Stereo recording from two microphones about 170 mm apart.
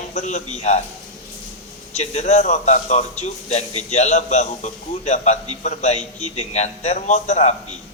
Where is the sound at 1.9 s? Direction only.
40° left (ahead or behind).